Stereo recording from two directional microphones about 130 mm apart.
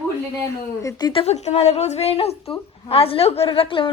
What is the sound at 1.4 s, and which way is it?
A woman's voice, 55° left (ahead or behind).